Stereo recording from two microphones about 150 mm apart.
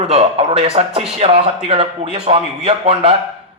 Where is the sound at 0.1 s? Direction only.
45° right (ahead or behind).